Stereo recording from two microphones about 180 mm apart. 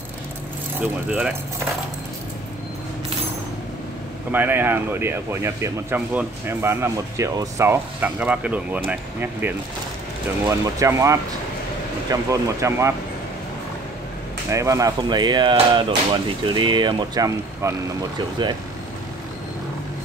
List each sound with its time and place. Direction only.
0.7 s speech: 10° right (ahead or behind)
4.3 s speech: 10° right (ahead or behind)
14.5 s speech: 15° right (ahead or behind)